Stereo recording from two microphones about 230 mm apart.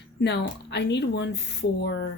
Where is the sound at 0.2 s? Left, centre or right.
Left.